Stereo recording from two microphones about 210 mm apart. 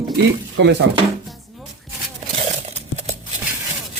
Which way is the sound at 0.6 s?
55° right (ahead or behind).